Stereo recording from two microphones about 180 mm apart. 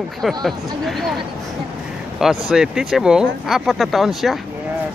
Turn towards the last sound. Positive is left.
turn(degrees=0)  # may be behind; listen again after turning